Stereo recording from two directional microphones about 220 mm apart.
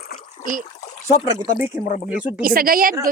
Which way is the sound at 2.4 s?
40° right (ahead or behind).